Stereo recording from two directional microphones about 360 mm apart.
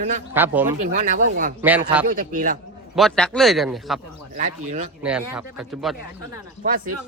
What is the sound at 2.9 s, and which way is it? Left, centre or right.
Speech, centre.